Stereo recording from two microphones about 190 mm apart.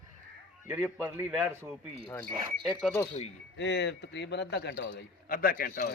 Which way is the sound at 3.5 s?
65° left (ahead or behind).